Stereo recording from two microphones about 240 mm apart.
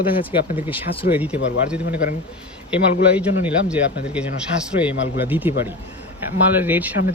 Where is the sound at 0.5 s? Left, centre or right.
Centre.